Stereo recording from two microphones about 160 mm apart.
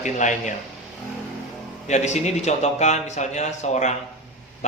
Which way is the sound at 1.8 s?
45° left (ahead or behind).